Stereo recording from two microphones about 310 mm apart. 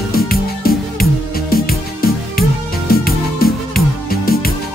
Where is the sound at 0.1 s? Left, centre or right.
Left.